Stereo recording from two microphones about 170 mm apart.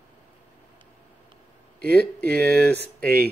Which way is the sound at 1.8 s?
70° right (ahead or behind).